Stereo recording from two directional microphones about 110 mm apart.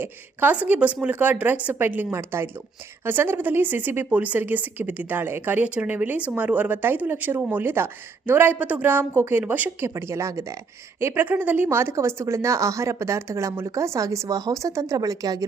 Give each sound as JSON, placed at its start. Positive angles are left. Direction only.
{"t": 0.0, "sound": "a woman's voice", "side_deg": -15}